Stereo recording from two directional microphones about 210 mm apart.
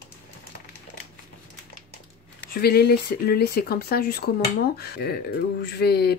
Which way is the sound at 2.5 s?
50° left (ahead or behind).